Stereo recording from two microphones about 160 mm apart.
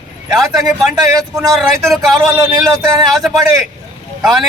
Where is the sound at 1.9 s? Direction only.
Centre (ahead or behind).